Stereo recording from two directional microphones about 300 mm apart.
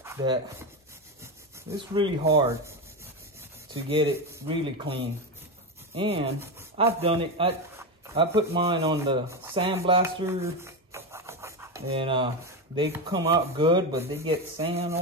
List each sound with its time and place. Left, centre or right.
0.0 s speech: centre
2.0 s speech: centre
3.9 s a man's voice: centre